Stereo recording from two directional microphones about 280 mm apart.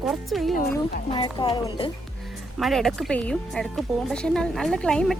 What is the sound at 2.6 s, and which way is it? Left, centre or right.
Speech, centre.